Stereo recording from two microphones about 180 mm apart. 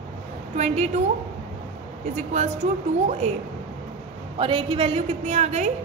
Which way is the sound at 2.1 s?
40° right (ahead or behind).